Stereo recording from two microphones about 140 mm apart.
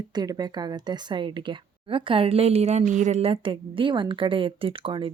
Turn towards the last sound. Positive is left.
turn(degrees=-35)  # may be behind; listen again after turning